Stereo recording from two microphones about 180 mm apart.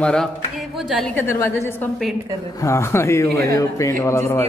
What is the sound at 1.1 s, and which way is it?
A man's voice, 10° left (ahead or behind).